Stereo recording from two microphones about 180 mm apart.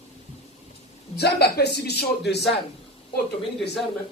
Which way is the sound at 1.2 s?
65° left (ahead or behind).